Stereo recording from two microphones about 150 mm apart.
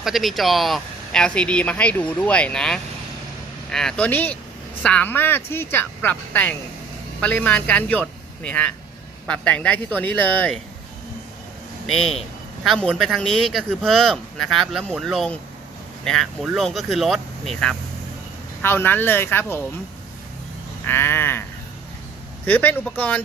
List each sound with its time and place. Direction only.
0.0 s speech: centre (ahead or behind)
12.6 s speech: centre (ahead or behind)
20.8 s speech: 15° left (ahead or behind)
22.4 s speech: 10° left (ahead or behind)